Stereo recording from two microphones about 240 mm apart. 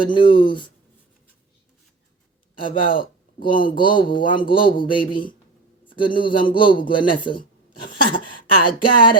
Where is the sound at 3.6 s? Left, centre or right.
Centre.